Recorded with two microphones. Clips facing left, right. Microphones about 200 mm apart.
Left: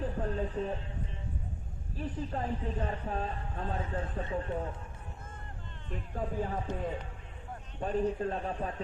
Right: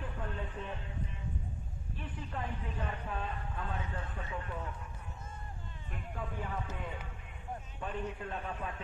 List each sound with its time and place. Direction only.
0.0 s a sound: 35° left (ahead or behind)
2.0 s speech: 35° left (ahead or behind)
6.1 s speech: 35° left (ahead or behind)
7.8 s speech: 35° left (ahead or behind)